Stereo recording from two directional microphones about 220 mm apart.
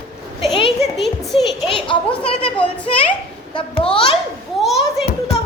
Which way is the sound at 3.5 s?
25° left (ahead or behind).